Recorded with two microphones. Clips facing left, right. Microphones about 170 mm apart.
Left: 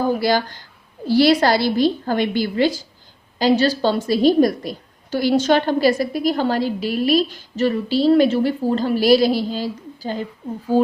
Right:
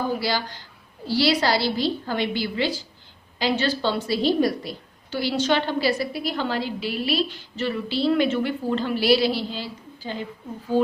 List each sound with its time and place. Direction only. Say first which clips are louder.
0.2 s a woman's voice: left 7 dB; 50° left (ahead or behind)